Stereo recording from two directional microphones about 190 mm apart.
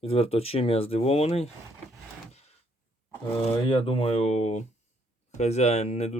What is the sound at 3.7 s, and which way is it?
Speech, 25° left (ahead or behind).